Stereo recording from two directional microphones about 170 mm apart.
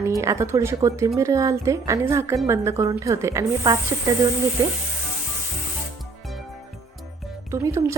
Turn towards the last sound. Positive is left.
turn(degrees=-15)  # may be behind; listen again after turning